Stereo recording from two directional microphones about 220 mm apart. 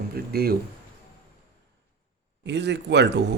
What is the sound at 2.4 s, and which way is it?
Speech, 50° right (ahead or behind).